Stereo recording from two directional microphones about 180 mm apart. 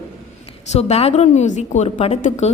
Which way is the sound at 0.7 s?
35° left (ahead or behind).